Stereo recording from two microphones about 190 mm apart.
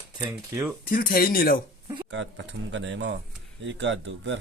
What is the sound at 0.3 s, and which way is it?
Speech, 10° right (ahead or behind).